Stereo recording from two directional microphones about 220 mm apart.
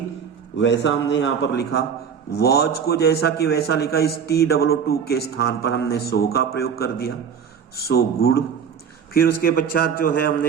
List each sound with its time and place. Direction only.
0.5 s a man's voice: 55° left (ahead or behind)